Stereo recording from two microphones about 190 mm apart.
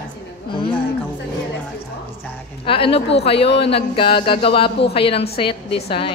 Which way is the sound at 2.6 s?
30° left (ahead or behind).